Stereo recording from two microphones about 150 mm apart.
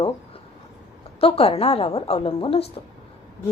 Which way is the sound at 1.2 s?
40° left (ahead or behind).